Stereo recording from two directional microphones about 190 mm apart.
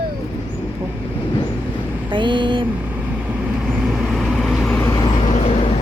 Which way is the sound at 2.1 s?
25° right (ahead or behind).